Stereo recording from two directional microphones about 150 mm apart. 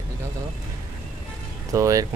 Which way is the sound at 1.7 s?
20° right (ahead or behind).